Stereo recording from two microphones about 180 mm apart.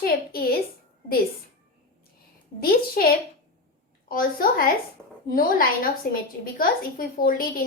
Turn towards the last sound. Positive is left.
turn(degrees=50)  # may be behind; listen again after turning